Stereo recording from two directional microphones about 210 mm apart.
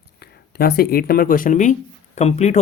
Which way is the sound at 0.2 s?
50° left (ahead or behind).